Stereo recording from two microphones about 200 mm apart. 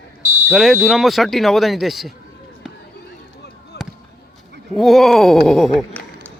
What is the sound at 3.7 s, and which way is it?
Basketball bounce, 55° left (ahead or behind).